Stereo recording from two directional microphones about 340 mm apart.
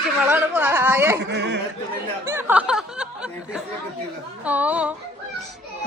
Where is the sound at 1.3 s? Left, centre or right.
Right.